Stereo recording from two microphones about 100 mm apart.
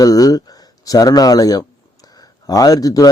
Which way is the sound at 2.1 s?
40° left (ahead or behind).